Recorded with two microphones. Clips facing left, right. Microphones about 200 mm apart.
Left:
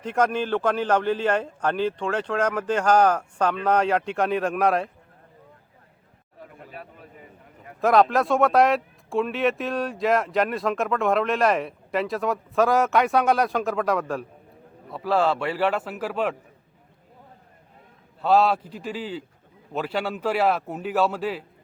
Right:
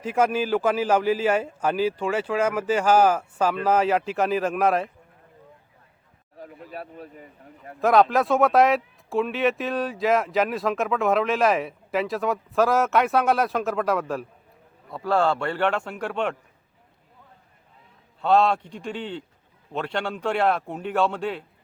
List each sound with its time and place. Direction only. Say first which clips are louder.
0.0 s a man's voice: right 1 dB; 5° right (ahead or behind)
6.7 s a man's voice: right 7 dB; 40° right (ahead or behind)
7.8 s speech: even; centre (ahead or behind)
18.2 s speech: even; 5° left (ahead or behind)